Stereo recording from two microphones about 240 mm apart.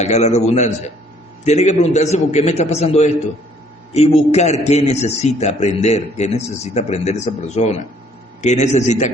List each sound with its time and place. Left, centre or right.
0.0 s a man's voice: left